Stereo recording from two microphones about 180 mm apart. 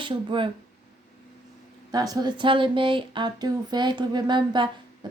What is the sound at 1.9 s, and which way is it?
Speech, 20° right (ahead or behind).